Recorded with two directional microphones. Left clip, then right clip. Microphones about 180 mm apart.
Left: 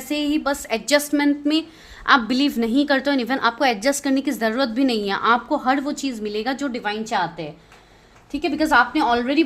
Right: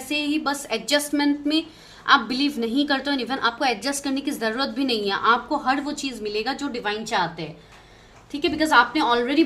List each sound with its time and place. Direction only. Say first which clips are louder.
0.1 s a woman's voice: left 2 dB; 45° left (ahead or behind)
8.3 s a woman's voice: left 1 dB; 40° left (ahead or behind)